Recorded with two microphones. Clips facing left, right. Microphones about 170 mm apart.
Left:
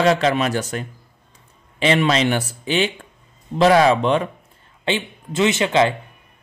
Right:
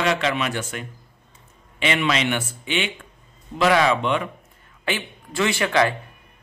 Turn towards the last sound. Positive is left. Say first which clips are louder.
# left 3 dB
turn(degrees=20)  # may be behind; listen again after turning